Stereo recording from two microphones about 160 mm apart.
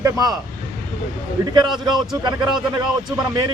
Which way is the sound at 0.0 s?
20° right (ahead or behind).